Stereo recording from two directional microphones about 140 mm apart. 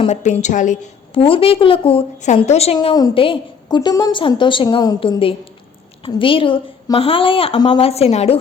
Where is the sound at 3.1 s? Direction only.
40° left (ahead or behind).